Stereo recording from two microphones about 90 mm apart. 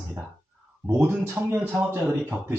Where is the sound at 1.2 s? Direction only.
25° right (ahead or behind).